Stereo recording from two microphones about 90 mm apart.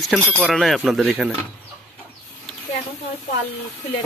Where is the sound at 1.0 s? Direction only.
15° right (ahead or behind).